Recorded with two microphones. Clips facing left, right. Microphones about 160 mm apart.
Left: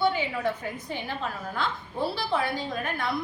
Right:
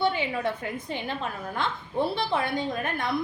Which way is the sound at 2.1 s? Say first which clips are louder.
Right 1 dB; 20° right (ahead or behind).